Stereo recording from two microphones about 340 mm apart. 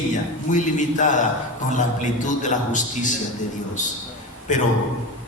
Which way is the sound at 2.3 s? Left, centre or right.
Left.